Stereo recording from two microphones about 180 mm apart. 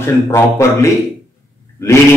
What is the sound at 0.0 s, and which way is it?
Speech, 15° left (ahead or behind).